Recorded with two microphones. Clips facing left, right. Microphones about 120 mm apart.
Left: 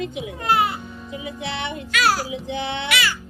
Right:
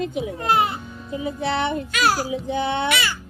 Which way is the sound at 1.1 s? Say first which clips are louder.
Right 7 dB; 35° right (ahead or behind).